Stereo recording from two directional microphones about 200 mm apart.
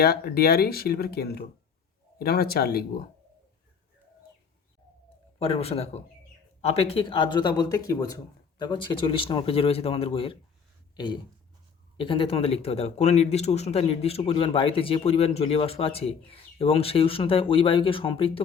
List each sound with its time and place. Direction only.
0.0 s speech: 50° left (ahead or behind)
5.4 s a man's voice: 30° left (ahead or behind)